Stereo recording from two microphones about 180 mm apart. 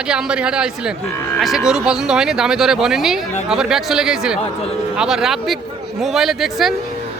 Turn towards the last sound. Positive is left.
turn(degrees=0)  # may be behind; listen again after turning